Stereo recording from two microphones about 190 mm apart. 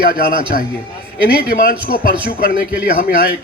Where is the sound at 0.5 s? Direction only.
45° left (ahead or behind).